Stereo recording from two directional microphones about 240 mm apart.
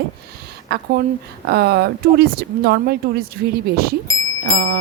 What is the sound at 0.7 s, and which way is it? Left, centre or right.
Speech, right.